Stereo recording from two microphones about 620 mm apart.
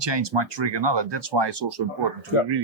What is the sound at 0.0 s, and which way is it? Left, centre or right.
Speech, right.